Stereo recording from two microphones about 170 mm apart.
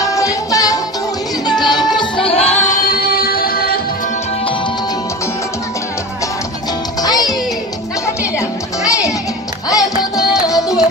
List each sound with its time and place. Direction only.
0.0 s music: 20° left (ahead or behind); by 2.6 s 35° left (ahead or behind)
2.7 s music: 60° left (ahead or behind)
7.0 s music: 20° left (ahead or behind)
8.4 s music: 20° left (ahead or behind)